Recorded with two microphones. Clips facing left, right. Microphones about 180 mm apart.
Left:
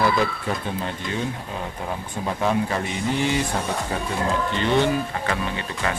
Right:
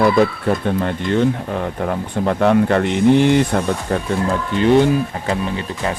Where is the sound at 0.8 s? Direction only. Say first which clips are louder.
Right 10 dB; 60° right (ahead or behind).